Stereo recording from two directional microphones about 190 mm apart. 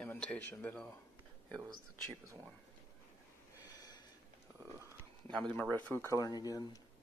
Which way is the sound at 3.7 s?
20° left (ahead or behind).